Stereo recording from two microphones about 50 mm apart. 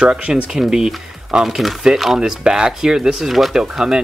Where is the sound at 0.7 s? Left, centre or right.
Centre.